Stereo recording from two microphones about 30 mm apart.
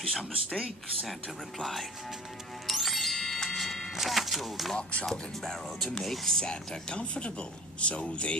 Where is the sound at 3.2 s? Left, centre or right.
Centre.